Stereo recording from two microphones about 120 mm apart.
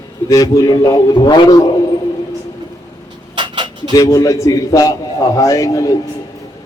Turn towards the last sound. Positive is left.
turn(degrees=30)  # may be behind; listen again after turning